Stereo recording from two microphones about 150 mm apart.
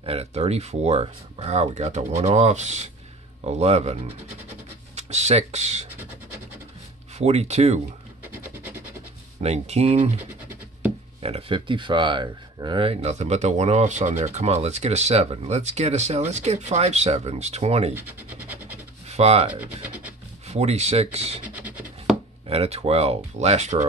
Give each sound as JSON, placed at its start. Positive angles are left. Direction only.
{"t": 0.0, "sound": "speech", "side_deg": -45}
{"t": 7.2, "sound": "speech", "side_deg": -45}
{"t": 8.3, "sound": "a sound", "side_deg": -10}
{"t": 9.4, "sound": "speech", "side_deg": -45}
{"t": 11.2, "sound": "speech", "side_deg": -40}
{"t": 17.9, "sound": "scratch", "side_deg": -10}
{"t": 19.0, "sound": "speech", "side_deg": -45}
{"t": 19.5, "sound": "speech", "side_deg": -10}
{"t": 20.4, "sound": "speech", "side_deg": -45}
{"t": 21.5, "sound": "writing", "side_deg": -10}
{"t": 22.5, "sound": "speech", "side_deg": -45}